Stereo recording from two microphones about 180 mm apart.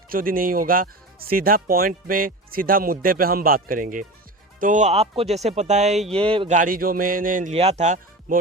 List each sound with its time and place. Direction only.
0.1 s speech: 50° right (ahead or behind); by 6.5 s 30° right (ahead or behind)
6.5 s speech: 50° right (ahead or behind)
7.5 s speech: 35° right (ahead or behind)